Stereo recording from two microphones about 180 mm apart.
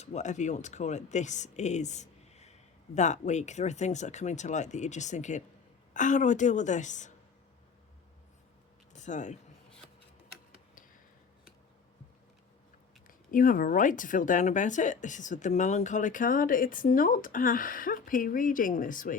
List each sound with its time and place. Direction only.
0.0 s speech: 40° left (ahead or behind)
8.9 s speech: 40° left (ahead or behind)
13.1 s speech: 50° left (ahead or behind)